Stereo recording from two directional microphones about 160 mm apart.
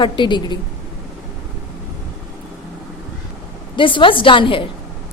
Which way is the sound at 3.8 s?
30° left (ahead or behind).